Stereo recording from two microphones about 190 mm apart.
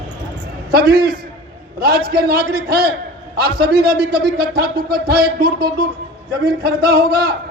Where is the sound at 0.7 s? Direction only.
55° right (ahead or behind).